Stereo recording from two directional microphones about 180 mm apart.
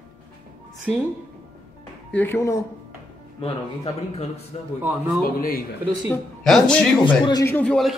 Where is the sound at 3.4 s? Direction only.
35° left (ahead or behind).